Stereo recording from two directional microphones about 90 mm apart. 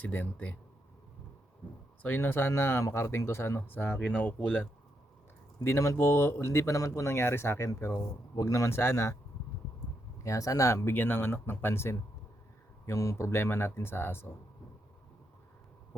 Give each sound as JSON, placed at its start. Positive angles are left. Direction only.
{"t": 0.0, "sound": "speech", "side_deg": 20}
{"t": 2.0, "sound": "speech", "side_deg": 25}
{"t": 5.6, "sound": "speech", "side_deg": 35}
{"t": 10.2, "sound": "speech", "side_deg": 40}